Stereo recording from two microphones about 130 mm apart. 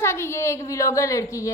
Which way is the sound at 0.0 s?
20° left (ahead or behind).